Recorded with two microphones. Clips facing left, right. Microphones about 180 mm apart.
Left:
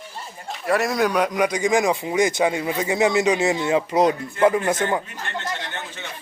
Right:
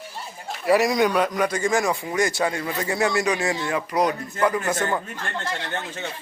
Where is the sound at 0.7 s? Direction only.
Centre (ahead or behind).